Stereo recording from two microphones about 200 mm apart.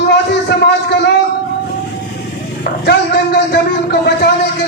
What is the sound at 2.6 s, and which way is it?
A man's voice, 55° left (ahead or behind).